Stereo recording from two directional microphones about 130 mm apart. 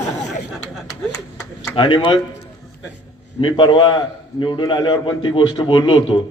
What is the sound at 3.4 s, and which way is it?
A man's voice, 40° left (ahead or behind).